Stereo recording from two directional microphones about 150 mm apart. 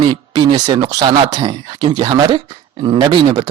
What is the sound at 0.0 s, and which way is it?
A man's voice, 30° right (ahead or behind).